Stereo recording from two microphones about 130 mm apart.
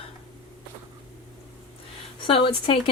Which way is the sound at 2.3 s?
40° left (ahead or behind).